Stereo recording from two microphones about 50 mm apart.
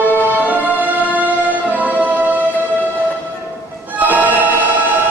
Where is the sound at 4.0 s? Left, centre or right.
Right.